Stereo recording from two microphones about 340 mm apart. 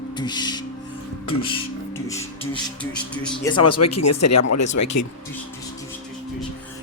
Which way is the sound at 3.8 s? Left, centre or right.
Left.